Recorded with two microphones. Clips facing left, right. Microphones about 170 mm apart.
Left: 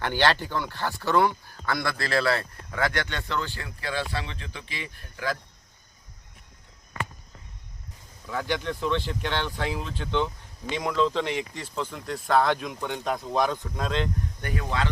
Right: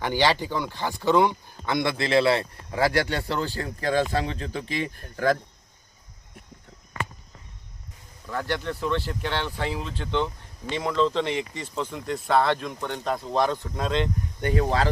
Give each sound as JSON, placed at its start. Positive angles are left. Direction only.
{"t": 0.0, "sound": "speech", "side_deg": -10}
{"t": 8.3, "sound": "speech", "side_deg": 0}
{"t": 14.4, "sound": "speech", "side_deg": -35}